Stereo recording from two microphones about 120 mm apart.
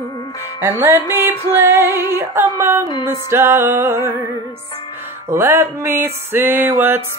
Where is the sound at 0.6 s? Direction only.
20° right (ahead or behind).